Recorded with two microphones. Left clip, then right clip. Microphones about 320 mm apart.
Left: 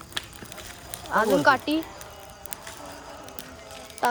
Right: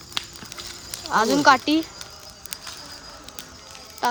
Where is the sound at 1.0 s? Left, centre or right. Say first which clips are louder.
Right 3 dB; centre.